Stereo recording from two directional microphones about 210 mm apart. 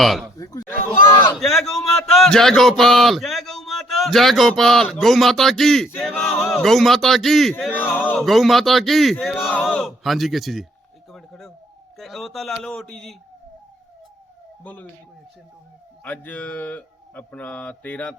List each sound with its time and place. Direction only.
0.0 s speech: centre (ahead or behind)
0.3 s speech: 15° left (ahead or behind)
1.4 s speech: centre (ahead or behind)
11.1 s a sound: centre (ahead or behind)
11.9 s speech: centre (ahead or behind)
14.6 s speech: 5° left (ahead or behind)
16.0 s speech: 5° left (ahead or behind)